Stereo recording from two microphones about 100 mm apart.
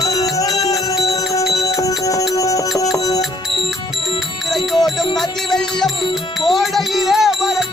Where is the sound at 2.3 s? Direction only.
35° left (ahead or behind).